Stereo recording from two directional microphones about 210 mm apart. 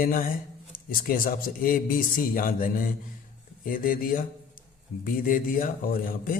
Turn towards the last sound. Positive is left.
turn(degrees=40)  # may be behind; listen again after turning